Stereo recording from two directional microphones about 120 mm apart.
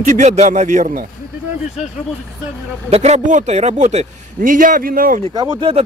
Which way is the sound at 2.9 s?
70° right (ahead or behind).